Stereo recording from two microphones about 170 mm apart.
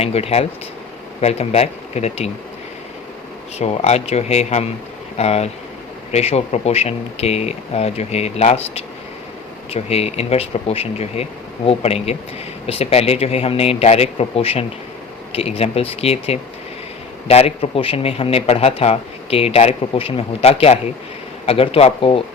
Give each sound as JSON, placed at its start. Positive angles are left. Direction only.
{"t": 0.0, "sound": "a man's voice", "side_deg": 35}
{"t": 3.6, "sound": "a man's voice", "side_deg": 40}